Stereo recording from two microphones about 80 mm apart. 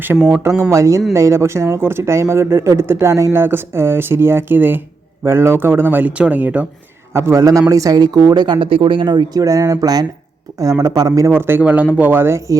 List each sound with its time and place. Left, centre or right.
0.1 s speech: centre
0.4 s a man's voice: right; by 6.7 s centre
7.1 s a man's voice: right
7.3 s speech: right
9.4 s speech: right
11.3 s a man's voice: right